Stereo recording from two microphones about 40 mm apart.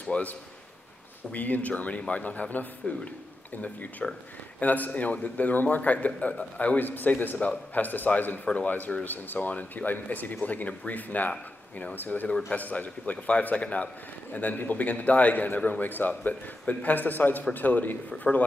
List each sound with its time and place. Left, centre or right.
0.0 s a man's voice: left
1.3 s a man's voice: left
4.0 s speech: centre
4.6 s a man's voice: left
6.8 s a man's voice: left